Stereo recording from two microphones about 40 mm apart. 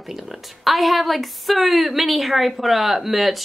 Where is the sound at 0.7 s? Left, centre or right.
Centre.